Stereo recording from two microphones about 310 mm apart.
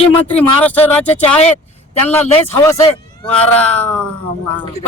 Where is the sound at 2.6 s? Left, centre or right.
Centre.